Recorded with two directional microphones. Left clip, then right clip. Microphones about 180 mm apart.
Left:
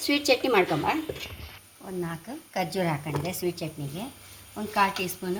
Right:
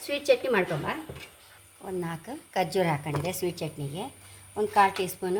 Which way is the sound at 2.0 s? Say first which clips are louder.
Left 1 dB; 70° right (ahead or behind).